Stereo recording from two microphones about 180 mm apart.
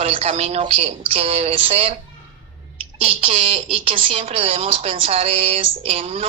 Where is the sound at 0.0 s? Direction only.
35° right (ahead or behind).